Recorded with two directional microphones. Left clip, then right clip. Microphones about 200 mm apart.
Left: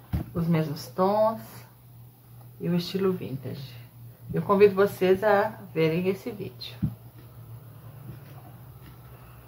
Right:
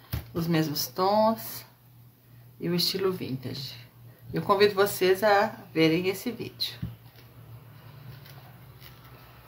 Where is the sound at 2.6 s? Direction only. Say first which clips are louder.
Right 1 dB; 45° right (ahead or behind).